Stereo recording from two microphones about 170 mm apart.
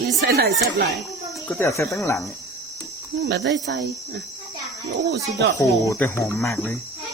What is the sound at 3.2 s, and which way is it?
Speech, 85° right.